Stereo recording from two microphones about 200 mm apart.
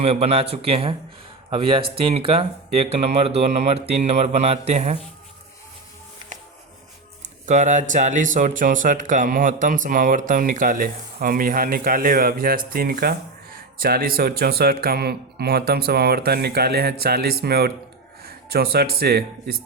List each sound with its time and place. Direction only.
0.0 s speech: 30° right (ahead or behind)
7.4 s speech: 35° right (ahead or behind)